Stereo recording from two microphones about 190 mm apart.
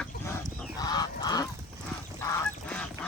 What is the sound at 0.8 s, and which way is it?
Goose, 20° left (ahead or behind).